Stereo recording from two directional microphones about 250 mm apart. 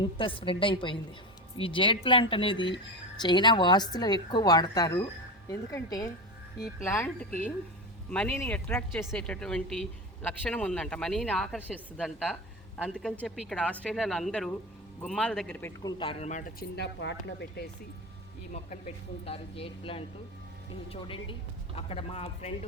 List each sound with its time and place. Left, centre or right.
0.0 s speech: left
8.1 s a woman's voice: centre; by 17.7 s left
19.2 s speech: left